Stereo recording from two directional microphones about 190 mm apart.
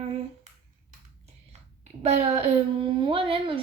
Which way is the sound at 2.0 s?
35° right (ahead or behind).